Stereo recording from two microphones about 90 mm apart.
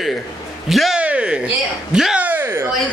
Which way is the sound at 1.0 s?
15° right (ahead or behind).